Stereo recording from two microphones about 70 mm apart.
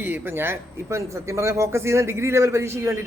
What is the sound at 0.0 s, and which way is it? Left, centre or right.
Speech, right.